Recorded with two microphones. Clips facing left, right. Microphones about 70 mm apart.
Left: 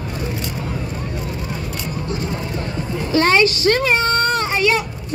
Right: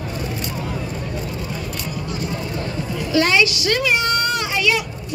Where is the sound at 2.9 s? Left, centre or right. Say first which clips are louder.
Left 2 dB; left.